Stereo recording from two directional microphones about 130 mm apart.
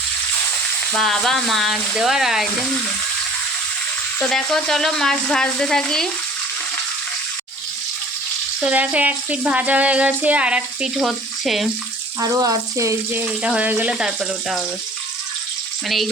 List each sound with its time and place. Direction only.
0.9 s speech: centre (ahead or behind)
4.2 s speech: 5° left (ahead or behind)
8.6 s speech: 10° right (ahead or behind)
12.2 s speech: 30° right (ahead or behind)
13.4 s speech: 10° right (ahead or behind)